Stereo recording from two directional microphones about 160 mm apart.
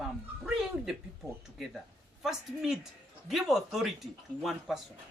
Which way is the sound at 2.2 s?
Centre (ahead or behind).